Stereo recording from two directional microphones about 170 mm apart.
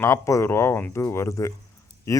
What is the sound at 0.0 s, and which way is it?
A man's voice, 15° left (ahead or behind).